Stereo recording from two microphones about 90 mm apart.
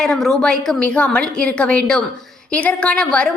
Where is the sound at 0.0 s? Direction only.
5° left (ahead or behind).